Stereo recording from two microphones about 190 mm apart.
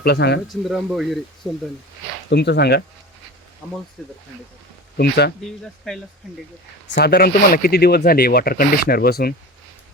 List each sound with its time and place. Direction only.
0.0 s speech: 60° left (ahead or behind)
0.4 s speech: centre (ahead or behind)
2.3 s speech: 60° left (ahead or behind)
4.9 s speech: 60° left (ahead or behind)
5.4 s speech: 5° left (ahead or behind)
6.9 s speech: 55° left (ahead or behind)